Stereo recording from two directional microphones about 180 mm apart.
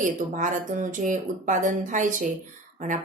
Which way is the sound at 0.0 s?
45° right (ahead or behind).